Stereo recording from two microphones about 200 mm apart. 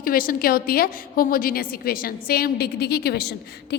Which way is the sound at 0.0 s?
45° left (ahead or behind).